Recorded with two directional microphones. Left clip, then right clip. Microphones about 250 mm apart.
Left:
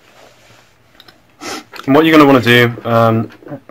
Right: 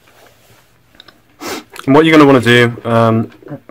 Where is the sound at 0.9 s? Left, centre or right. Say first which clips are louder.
Right 3 dB; right.